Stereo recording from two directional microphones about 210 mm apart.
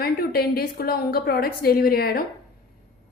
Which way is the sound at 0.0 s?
45° left (ahead or behind).